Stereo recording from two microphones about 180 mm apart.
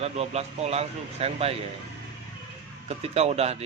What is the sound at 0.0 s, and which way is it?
Speech, 35° right (ahead or behind).